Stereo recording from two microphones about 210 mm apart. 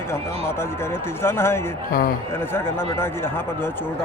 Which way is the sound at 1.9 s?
45° left (ahead or behind).